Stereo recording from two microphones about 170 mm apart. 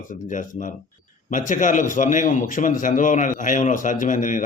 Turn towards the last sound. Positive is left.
turn(degrees=50)  # may be behind; listen again after turning